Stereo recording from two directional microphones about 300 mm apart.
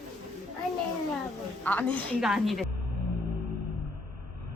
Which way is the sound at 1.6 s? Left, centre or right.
Centre.